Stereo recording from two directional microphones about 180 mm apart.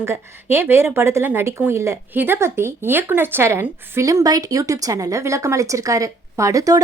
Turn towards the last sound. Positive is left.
turn(degrees=-20)  # may be behind; listen again after turning